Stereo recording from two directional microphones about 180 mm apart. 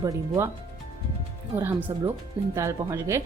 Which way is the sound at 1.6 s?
10° right (ahead or behind).